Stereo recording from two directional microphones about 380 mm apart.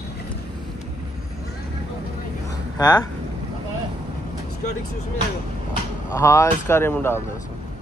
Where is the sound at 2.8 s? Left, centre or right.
Centre.